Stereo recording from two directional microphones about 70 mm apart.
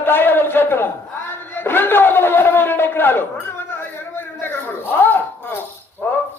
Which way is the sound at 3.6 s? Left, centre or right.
Left.